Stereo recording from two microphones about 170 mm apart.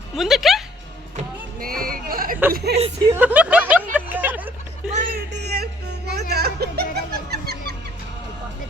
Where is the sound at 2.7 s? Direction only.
70° right (ahead or behind).